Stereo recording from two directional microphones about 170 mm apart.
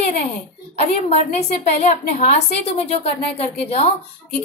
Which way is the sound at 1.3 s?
45° left (ahead or behind).